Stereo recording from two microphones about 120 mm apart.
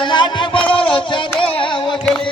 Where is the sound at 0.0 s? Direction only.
40° left (ahead or behind).